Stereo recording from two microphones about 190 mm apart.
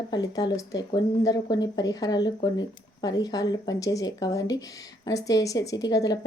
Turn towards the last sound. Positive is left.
turn(degrees=20)  # may be behind; listen again after turning